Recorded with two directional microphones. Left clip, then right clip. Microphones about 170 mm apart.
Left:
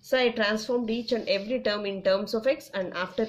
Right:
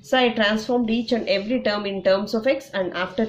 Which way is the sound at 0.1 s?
30° left (ahead or behind).